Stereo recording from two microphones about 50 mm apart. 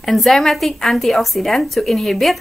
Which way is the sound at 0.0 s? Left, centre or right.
Centre.